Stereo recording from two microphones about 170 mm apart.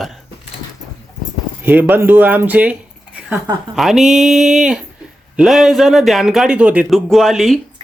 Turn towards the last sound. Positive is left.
turn(degrees=0)  # may be behind; listen again after turning